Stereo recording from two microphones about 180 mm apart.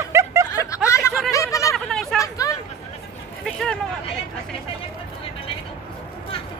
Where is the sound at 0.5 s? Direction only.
15° left (ahead or behind).